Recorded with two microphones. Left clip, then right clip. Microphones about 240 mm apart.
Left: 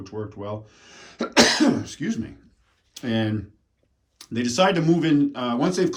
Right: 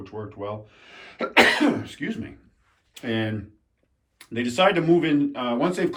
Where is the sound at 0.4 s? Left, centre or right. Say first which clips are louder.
Right 1 dB; centre.